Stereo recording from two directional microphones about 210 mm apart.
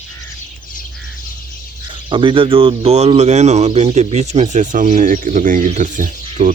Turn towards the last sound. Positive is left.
turn(degrees=-40)  # may be behind; listen again after turning